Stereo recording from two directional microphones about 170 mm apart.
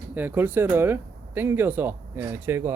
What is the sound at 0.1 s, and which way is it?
Speech, 10° right (ahead or behind).